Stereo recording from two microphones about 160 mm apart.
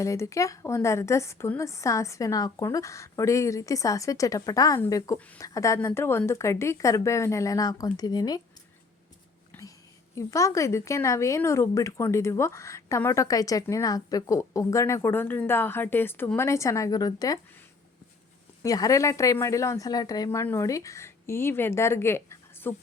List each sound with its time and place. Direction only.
0.0 s speech: 20° left (ahead or behind)
9.5 s a sound: 20° left (ahead or behind)
10.2 s speech: 20° left (ahead or behind)
18.6 s speech: 20° left (ahead or behind)